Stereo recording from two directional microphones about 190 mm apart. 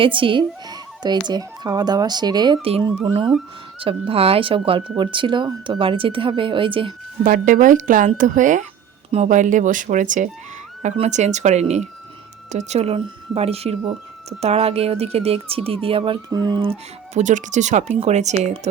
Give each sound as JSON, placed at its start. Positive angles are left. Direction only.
{"t": 0.0, "sound": "speech", "side_deg": -25}
{"t": 7.3, "sound": "speech", "side_deg": -45}
{"t": 17.2, "sound": "speech", "side_deg": -40}